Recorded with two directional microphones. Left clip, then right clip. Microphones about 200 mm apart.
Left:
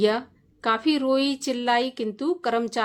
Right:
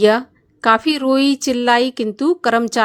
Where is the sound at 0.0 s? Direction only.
35° right (ahead or behind).